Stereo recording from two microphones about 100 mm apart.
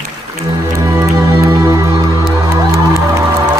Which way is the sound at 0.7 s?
30° right (ahead or behind).